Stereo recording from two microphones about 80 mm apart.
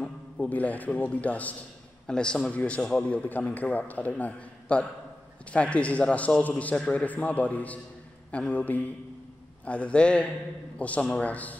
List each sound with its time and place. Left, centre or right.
0.0 s a man's voice: centre